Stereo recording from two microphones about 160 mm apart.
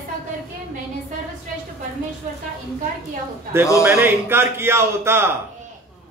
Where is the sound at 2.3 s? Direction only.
55° right (ahead or behind).